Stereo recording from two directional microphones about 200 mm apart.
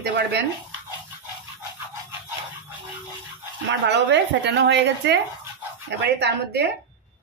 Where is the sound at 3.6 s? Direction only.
60° right (ahead or behind).